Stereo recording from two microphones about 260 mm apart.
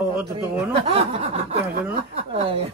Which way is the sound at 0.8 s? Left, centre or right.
Right.